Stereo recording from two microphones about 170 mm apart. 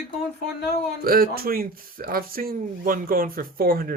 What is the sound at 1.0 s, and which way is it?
Speech, 60° right (ahead or behind).